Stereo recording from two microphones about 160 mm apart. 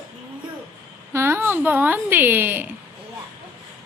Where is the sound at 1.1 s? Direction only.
15° right (ahead or behind).